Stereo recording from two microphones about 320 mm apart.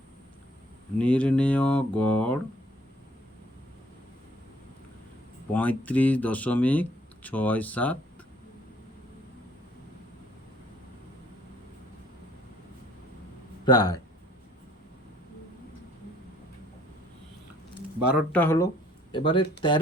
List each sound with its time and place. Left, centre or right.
0.9 s speech: centre
5.5 s speech: centre
13.7 s speech: centre
18.3 s speech: centre